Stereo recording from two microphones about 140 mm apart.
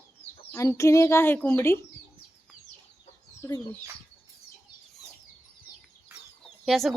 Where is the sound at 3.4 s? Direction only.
20° left (ahead or behind).